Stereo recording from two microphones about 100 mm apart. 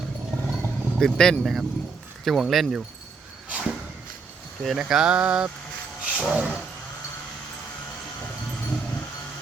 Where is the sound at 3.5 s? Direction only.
10° right (ahead or behind).